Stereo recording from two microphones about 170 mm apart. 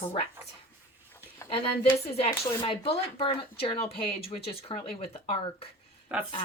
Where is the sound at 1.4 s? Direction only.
35° left (ahead or behind).